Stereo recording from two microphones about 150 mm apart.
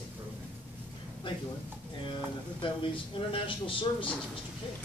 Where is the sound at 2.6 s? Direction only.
35° left (ahead or behind).